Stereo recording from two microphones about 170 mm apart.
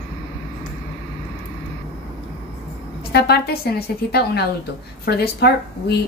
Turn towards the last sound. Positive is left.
turn(degrees=70)  # may be behind; listen again after turning